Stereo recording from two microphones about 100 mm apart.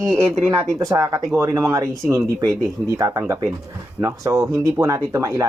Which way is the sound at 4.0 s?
30° right (ahead or behind).